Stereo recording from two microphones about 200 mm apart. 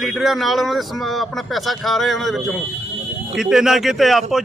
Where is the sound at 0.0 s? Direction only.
Centre (ahead or behind).